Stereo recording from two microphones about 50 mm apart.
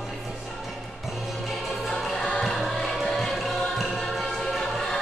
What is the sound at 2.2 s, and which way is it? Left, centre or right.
Music, centre.